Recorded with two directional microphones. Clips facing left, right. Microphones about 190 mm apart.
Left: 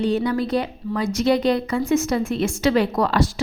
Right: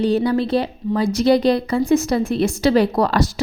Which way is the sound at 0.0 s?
35° right (ahead or behind).